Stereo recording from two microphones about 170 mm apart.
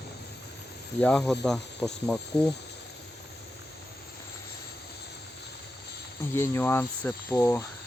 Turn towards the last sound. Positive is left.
turn(degrees=15)  # may be behind; listen again after turning